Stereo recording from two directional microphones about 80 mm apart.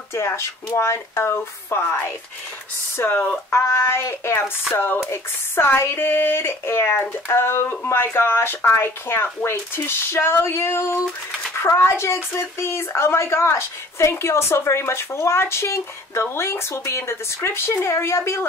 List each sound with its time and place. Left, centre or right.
0.1 s speech: left